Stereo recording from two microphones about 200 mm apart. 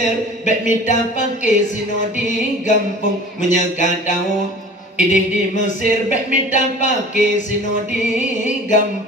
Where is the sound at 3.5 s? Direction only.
40° left (ahead or behind).